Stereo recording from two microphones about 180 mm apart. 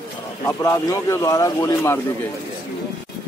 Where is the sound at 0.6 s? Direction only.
15° left (ahead or behind).